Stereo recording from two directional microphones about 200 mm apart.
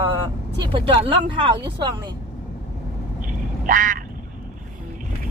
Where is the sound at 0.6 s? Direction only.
25° right (ahead or behind).